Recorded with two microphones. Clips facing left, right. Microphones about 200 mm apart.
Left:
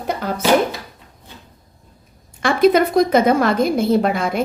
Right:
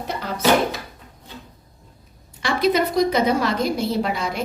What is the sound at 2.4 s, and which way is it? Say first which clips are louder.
A woman's voice: left 6 dB; 50° left (ahead or behind).